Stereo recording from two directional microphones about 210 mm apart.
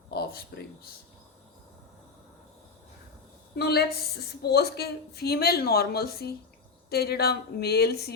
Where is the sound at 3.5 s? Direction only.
50° left (ahead or behind).